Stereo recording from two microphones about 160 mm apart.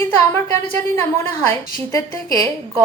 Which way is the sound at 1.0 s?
15° left (ahead or behind).